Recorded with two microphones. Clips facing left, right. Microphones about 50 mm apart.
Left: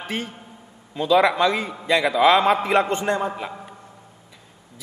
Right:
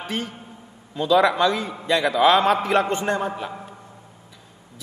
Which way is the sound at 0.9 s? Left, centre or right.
Left.